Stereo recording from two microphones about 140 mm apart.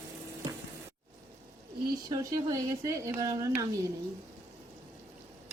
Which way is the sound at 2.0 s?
25° right (ahead or behind).